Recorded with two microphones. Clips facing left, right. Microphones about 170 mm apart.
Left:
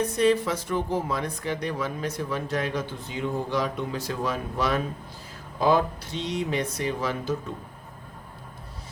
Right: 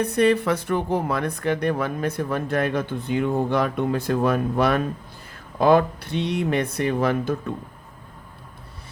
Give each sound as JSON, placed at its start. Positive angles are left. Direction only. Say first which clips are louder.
{"t": 0.0, "sound": "speech", "louder": "right 3 dB", "side_deg": -60}